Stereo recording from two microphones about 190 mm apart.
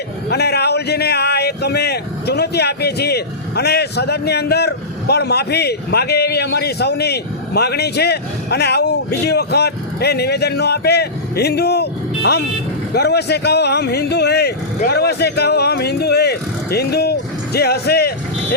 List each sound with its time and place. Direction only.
0.3 s a man's voice: 60° left (ahead or behind)